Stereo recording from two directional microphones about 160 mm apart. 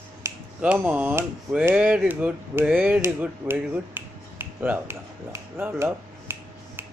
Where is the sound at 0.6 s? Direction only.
10° right (ahead or behind).